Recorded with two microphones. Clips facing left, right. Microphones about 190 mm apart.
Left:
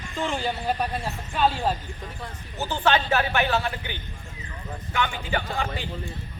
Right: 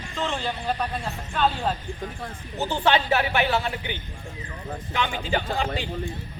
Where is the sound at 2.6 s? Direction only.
15° right (ahead or behind).